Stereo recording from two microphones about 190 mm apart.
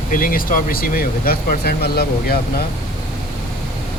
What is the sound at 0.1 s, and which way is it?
Speech, 45° left (ahead or behind).